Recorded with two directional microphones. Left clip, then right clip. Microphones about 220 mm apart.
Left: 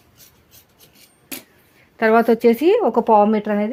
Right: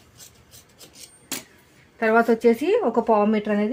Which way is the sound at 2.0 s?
45° left (ahead or behind).